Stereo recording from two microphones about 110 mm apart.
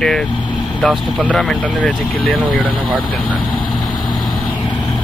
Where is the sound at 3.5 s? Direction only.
45° left (ahead or behind).